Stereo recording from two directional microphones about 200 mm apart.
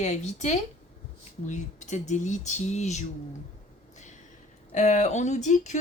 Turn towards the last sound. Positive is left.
turn(degrees=35)  # may be behind; listen again after turning